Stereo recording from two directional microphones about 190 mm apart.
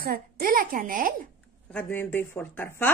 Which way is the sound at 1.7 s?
10° left (ahead or behind).